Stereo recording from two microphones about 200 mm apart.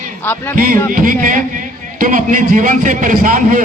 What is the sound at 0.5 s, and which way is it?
A man's voice, 45° right (ahead or behind).